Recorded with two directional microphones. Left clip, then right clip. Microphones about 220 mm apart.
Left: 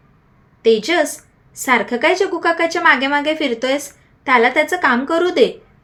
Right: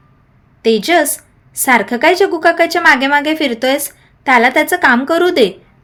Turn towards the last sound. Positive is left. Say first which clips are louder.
# right 3 dB
turn(degrees=-45)  # may be behind; listen again after turning